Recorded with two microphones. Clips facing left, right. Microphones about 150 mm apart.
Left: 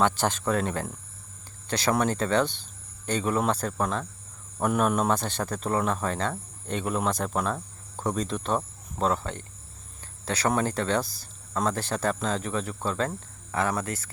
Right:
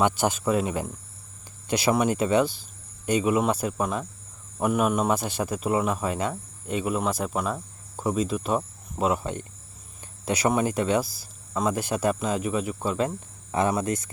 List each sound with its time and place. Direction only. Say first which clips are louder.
0.0 s speech: right 2 dB; 10° right (ahead or behind)